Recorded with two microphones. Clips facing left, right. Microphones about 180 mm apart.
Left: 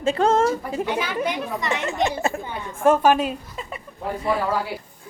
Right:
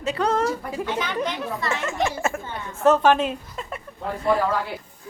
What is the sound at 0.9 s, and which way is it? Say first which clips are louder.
A woman's voice: left 1 dB; 10° left (ahead or behind).